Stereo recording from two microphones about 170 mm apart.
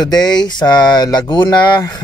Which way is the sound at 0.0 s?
25° left (ahead or behind).